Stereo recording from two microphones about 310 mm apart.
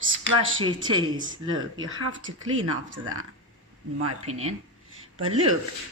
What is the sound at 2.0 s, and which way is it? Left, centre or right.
Speech, right.